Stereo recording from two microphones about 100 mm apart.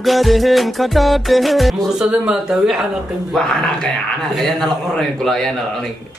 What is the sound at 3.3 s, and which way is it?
A man's voice, 5° left (ahead or behind).